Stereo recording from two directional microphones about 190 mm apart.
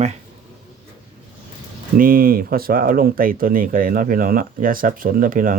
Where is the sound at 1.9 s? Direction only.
50° right (ahead or behind).